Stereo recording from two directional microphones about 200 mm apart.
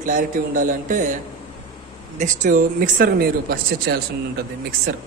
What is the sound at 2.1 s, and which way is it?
Speech, 40° right (ahead or behind).